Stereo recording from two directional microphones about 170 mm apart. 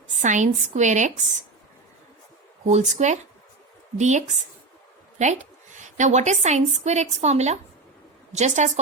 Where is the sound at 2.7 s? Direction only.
40° right (ahead or behind).